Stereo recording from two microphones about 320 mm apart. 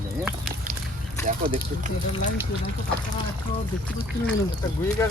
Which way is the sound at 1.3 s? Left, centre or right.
Centre.